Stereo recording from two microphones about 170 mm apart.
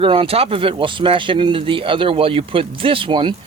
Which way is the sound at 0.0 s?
35° right (ahead or behind).